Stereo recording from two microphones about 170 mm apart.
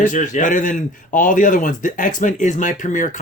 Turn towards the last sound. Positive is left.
turn(degrees=50)  # may be behind; listen again after turning